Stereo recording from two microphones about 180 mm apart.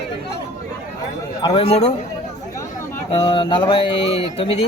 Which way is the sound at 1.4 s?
25° left (ahead or behind).